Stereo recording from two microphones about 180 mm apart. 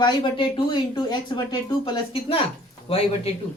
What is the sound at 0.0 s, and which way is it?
Speech, 30° left (ahead or behind).